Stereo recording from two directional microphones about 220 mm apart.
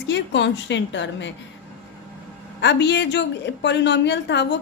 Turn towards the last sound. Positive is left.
turn(degrees=50)  # may be behind; listen again after turning